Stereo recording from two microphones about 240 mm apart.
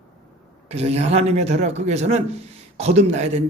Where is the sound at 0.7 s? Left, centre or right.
Right.